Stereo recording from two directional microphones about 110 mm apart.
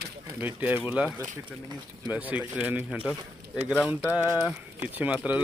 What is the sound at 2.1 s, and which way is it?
Speech, 15° right (ahead or behind).